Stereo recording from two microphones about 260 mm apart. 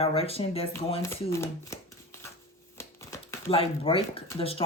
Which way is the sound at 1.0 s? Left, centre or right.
Centre.